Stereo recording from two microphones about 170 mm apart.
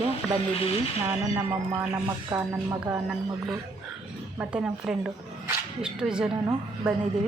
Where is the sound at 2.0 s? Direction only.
20° right (ahead or behind).